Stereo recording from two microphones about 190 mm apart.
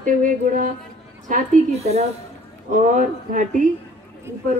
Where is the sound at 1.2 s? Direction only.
40° right (ahead or behind).